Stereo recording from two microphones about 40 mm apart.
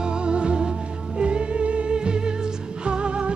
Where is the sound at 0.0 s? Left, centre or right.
Right.